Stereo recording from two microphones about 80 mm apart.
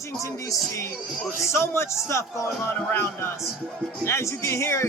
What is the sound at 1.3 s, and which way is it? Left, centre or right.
Speech, left.